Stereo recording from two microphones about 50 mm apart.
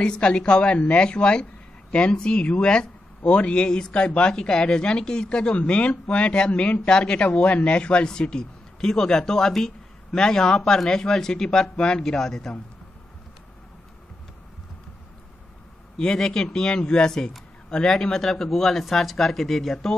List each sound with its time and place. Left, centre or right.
0.0 s a woman's voice: centre
16.0 s speech: centre